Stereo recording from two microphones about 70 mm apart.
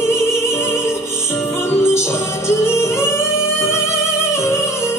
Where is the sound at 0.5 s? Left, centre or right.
Left.